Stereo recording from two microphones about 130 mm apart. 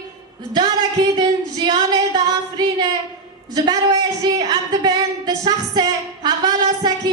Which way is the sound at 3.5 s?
30° right (ahead or behind).